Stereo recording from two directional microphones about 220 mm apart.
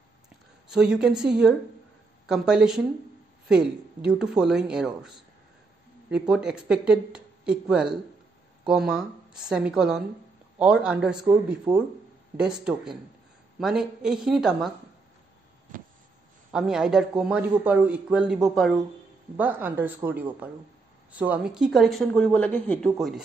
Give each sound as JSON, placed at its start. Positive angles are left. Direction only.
{"t": 0.7, "sound": "speech", "side_deg": -5}
{"t": 16.5, "sound": "speech", "side_deg": -5}